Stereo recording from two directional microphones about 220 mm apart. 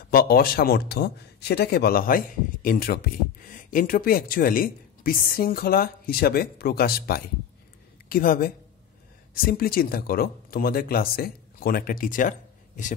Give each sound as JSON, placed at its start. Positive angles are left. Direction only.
{"t": 0.1, "sound": "speech", "side_deg": 45}